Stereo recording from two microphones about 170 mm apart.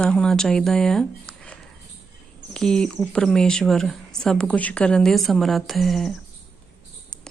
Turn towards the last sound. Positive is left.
turn(degrees=0)  # may be behind; listen again after turning